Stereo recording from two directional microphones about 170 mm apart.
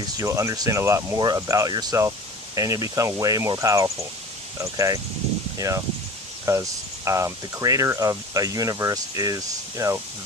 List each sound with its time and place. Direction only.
0.2 s speech: 20° right (ahead or behind)